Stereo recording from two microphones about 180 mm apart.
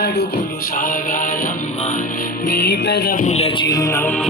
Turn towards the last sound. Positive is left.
turn(degrees=10)  # may be behind; listen again after turning